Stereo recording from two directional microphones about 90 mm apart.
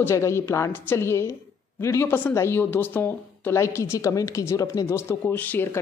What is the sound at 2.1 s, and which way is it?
Speech, 20° left (ahead or behind).